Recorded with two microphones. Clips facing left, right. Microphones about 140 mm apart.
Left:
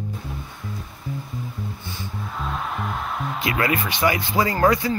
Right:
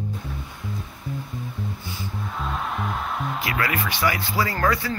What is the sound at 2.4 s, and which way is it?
Music, centre (ahead or behind).